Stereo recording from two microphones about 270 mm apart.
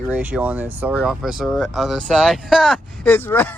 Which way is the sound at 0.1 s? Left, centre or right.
Centre.